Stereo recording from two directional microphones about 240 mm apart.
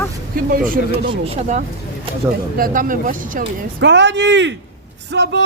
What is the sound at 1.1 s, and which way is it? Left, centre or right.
Speech, right.